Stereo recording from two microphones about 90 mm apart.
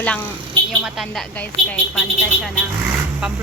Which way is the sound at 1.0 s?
5° left (ahead or behind).